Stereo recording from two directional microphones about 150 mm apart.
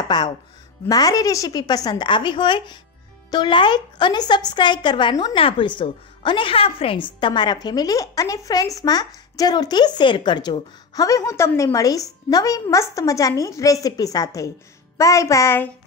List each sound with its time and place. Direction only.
0.1 s speech: 30° left (ahead or behind)